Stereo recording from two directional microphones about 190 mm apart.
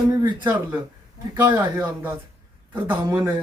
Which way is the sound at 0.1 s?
10° right (ahead or behind).